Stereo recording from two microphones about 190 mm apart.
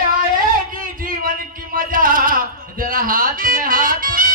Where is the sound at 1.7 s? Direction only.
45° right (ahead or behind).